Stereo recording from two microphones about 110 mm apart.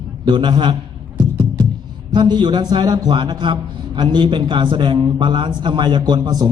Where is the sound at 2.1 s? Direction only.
40° right (ahead or behind).